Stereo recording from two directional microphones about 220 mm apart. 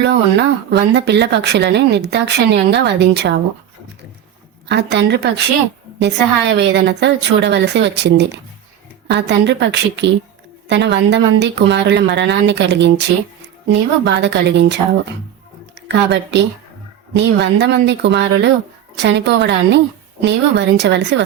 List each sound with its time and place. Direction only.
0.0 s speech: 50° right (ahead or behind)
4.7 s speech: 50° right (ahead or behind)